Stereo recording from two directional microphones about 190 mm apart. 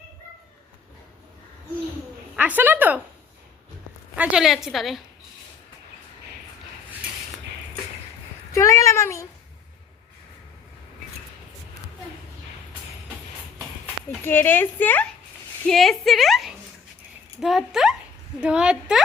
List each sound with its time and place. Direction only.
2.3 s a woman's voice: 10° right (ahead or behind)
4.1 s a woman's voice: 5° right (ahead or behind)
8.5 s speech: 15° left (ahead or behind)
14.3 s a woman's voice: 10° left (ahead or behind)